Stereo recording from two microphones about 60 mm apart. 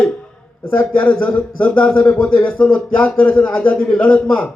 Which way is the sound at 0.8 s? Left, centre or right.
Left.